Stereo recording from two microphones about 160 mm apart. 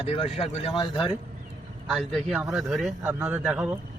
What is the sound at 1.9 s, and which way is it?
Speech, 5° left (ahead or behind).